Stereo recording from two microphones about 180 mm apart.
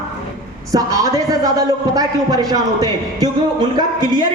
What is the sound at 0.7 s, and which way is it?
A man's voice, 20° right (ahead or behind).